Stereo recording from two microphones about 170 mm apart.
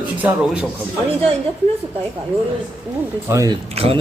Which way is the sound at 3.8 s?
35° right (ahead or behind).